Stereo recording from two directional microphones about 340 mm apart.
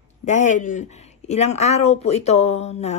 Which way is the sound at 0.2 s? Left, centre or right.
Left.